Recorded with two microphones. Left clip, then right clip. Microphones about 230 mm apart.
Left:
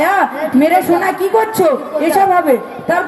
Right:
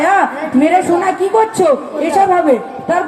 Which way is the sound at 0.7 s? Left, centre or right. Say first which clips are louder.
Even; left.